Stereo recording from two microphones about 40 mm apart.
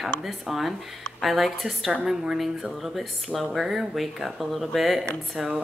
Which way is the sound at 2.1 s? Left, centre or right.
Centre.